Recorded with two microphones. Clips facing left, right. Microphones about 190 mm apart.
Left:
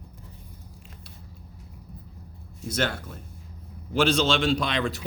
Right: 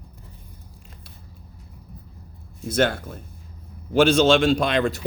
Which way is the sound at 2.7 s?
50° right (ahead or behind).